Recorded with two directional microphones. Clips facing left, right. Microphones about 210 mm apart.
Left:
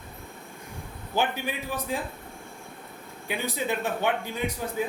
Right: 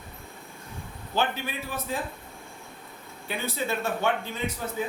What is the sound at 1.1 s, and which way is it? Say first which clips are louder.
Speech: left 1 dB; 15° left (ahead or behind).